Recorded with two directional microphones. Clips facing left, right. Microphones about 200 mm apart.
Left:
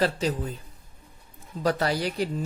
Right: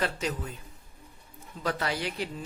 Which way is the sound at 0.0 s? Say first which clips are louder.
Left 6 dB; 35° left (ahead or behind).